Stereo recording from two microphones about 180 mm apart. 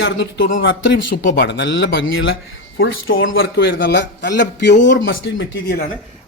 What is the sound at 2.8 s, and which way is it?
A man's voice, 60° left (ahead or behind).